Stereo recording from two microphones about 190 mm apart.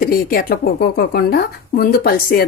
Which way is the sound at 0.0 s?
50° left (ahead or behind).